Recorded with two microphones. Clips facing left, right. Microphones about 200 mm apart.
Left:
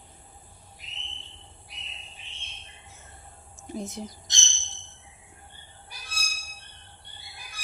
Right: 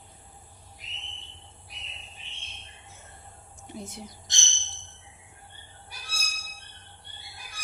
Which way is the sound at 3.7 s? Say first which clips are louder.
Left 5 dB; 40° left (ahead or behind).